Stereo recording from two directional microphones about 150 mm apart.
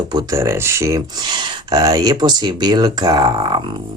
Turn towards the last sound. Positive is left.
turn(degrees=-30)  # may be behind; listen again after turning